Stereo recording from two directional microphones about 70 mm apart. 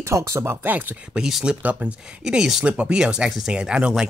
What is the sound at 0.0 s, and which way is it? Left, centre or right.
Speech, right.